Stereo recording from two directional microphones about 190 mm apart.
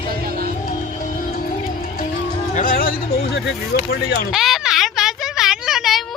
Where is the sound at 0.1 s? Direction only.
55° right (ahead or behind).